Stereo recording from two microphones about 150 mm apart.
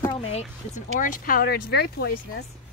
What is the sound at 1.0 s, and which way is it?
Speech, 65° left (ahead or behind).